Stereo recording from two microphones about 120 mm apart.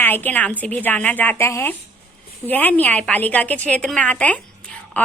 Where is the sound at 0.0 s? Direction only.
15° left (ahead or behind).